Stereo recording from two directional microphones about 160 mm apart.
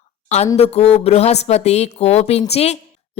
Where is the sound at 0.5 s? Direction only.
40° left (ahead or behind).